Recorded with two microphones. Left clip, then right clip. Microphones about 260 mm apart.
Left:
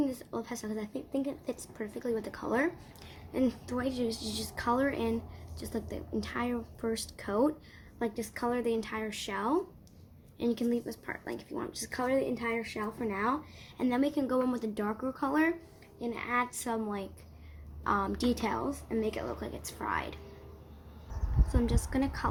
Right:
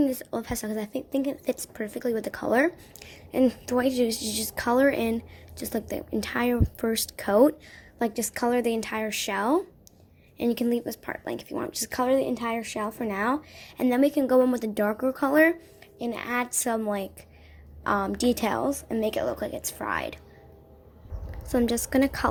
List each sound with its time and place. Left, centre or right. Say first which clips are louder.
0.0 s a woman's voice: right 7 dB; right
21.5 s a woman's voice: right 9 dB; right